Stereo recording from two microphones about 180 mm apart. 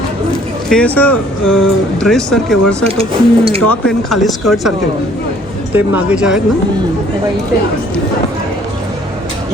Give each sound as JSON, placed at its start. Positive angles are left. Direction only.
{"t": 0.7, "sound": "speech", "side_deg": 5}
{"t": 2.9, "sound": "speech", "side_deg": -30}
{"t": 3.7, "sound": "speech", "side_deg": 0}
{"t": 5.7, "sound": "speech", "side_deg": -5}